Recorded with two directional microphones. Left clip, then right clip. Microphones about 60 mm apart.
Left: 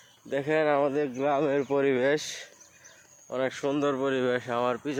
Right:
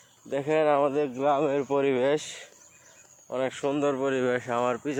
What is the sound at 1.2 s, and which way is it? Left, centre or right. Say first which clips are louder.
Speech: right 2 dB; left.